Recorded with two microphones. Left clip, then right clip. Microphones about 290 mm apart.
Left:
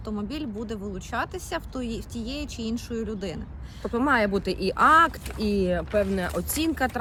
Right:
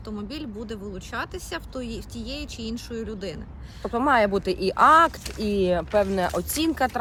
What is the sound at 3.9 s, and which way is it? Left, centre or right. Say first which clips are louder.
Speech: right 3 dB; centre.